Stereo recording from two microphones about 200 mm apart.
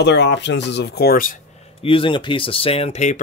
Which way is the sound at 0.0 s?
60° left (ahead or behind).